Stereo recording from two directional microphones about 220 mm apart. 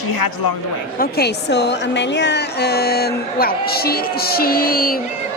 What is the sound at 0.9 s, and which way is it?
A woman's voice, 45° left (ahead or behind).